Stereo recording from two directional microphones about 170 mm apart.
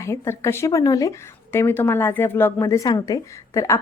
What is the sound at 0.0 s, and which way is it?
Speech, 15° left (ahead or behind).